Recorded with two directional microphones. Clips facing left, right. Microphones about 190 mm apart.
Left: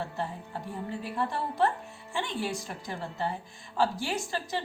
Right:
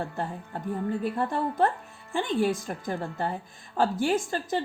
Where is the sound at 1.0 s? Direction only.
50° right (ahead or behind).